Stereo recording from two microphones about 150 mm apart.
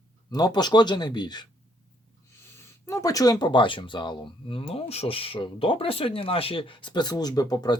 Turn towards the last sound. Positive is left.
turn(degrees=25)  # may be behind; listen again after turning